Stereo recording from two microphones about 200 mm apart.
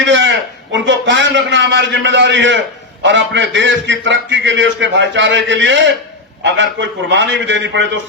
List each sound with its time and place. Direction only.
0.0 s a man's voice: 65° right (ahead or behind)